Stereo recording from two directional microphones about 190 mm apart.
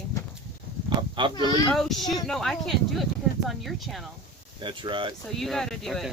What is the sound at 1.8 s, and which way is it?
Speech, centre (ahead or behind).